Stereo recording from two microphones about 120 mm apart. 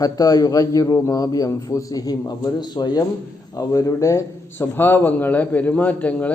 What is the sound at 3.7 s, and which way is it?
A man's voice, 25° left (ahead or behind).